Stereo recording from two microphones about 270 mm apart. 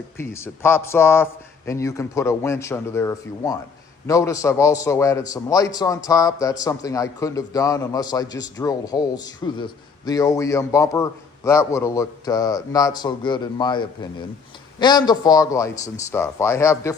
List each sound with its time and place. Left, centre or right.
0.2 s a man's voice: centre